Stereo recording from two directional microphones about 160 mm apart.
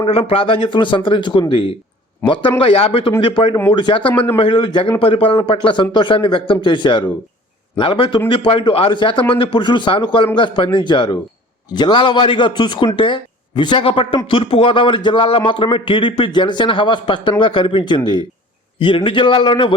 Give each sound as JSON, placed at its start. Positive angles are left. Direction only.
{"t": 0.0, "sound": "speech", "side_deg": 35}
{"t": 4.1, "sound": "speech", "side_deg": 10}
{"t": 4.4, "sound": "speech", "side_deg": 30}